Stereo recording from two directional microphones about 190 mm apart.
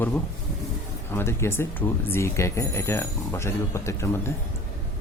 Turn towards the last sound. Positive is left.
turn(degrees=15)  # may be behind; listen again after turning